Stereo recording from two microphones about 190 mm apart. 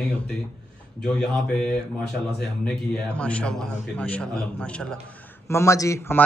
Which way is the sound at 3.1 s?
5° left (ahead or behind).